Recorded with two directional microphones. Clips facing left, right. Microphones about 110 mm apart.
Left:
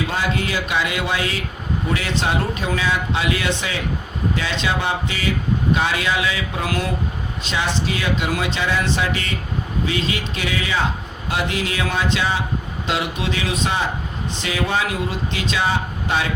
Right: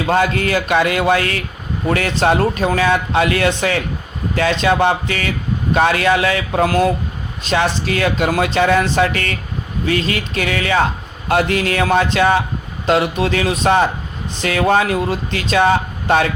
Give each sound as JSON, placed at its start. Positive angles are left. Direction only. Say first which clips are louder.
{"t": 0.1, "sound": "speech", "louder": "right 7 dB", "side_deg": -55}